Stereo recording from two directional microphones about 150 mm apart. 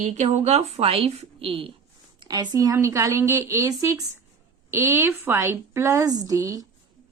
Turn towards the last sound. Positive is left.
turn(degrees=-25)  # may be behind; listen again after turning